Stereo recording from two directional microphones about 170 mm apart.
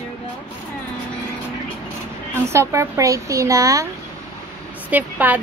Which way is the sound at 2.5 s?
15° right (ahead or behind).